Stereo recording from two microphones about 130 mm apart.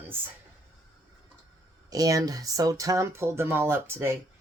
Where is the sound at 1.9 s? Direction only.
30° right (ahead or behind).